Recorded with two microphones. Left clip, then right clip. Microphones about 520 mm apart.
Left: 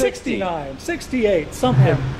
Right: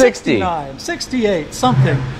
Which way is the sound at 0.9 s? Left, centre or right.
Right.